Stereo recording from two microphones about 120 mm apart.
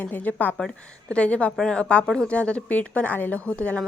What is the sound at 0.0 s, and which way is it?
A woman's voice, 15° left (ahead or behind).